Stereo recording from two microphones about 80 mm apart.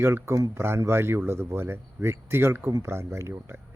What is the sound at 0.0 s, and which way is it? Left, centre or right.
A man's voice, right.